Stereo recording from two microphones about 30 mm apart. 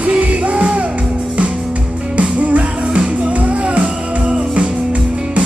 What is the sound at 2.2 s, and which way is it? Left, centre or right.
Music, right.